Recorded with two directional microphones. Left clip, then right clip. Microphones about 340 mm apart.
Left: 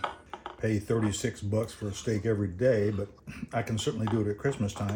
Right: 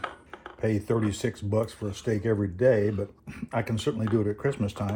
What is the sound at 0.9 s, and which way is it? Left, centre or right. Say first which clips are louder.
Speech: right 2 dB; centre.